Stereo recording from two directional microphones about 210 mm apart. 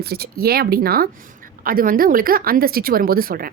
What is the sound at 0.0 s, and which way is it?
Speech, 50° right (ahead or behind).